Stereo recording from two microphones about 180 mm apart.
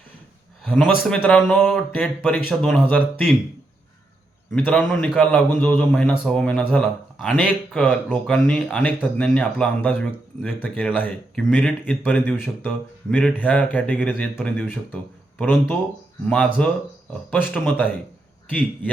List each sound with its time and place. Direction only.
1.1 s speech: 5° left (ahead or behind)
4.5 s a man's voice: 5° left (ahead or behind)